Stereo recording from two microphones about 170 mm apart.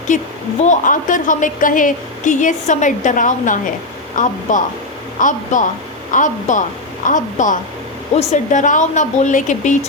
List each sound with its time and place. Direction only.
0.1 s a woman's voice: 45° left (ahead or behind)